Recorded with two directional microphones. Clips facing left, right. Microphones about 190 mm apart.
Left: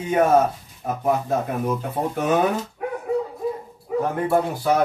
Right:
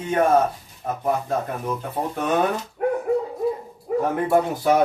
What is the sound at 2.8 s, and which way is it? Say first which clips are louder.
Dog: right 6 dB; 50° right (ahead or behind).